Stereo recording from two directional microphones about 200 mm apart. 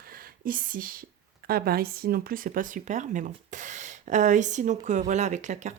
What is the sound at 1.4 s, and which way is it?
Speech, 50° right (ahead or behind).